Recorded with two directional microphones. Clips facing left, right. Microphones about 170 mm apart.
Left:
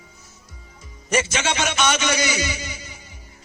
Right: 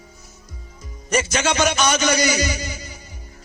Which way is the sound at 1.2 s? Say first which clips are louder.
Right 4 dB; 40° right (ahead or behind).